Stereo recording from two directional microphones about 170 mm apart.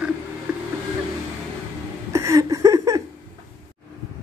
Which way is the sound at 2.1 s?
20° right (ahead or behind).